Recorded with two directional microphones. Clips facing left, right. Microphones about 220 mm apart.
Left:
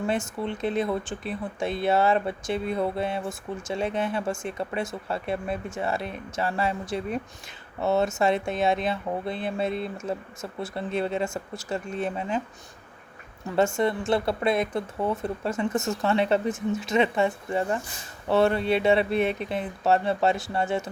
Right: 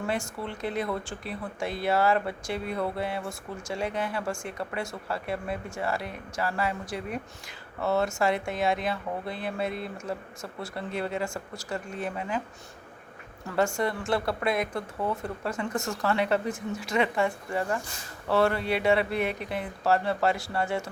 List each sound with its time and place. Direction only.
0.1 s speech: 20° left (ahead or behind)
13.7 s speech: 25° left (ahead or behind)